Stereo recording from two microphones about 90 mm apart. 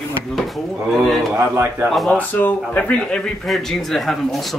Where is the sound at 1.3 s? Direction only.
25° right (ahead or behind).